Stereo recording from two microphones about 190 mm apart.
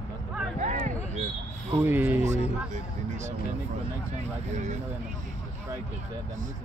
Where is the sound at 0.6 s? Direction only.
40° right (ahead or behind).